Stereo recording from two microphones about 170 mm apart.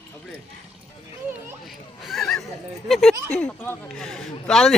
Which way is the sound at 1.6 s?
Centre (ahead or behind).